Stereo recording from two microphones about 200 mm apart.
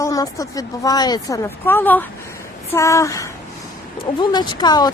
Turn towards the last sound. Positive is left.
turn(degrees=20)  # may be behind; listen again after turning